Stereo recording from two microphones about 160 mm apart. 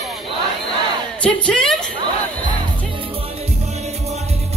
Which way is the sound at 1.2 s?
5° left (ahead or behind).